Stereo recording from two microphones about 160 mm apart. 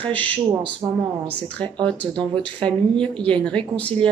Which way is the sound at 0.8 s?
25° right (ahead or behind).